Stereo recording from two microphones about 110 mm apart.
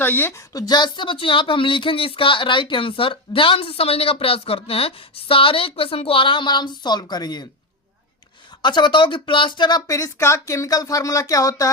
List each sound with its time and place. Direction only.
0.0 s a woman's voice: 20° left (ahead or behind)
0.5 s speech: 35° left (ahead or behind)
8.6 s speech: 45° left (ahead or behind)